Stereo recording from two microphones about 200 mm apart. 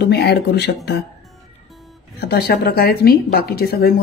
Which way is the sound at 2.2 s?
50° left (ahead or behind).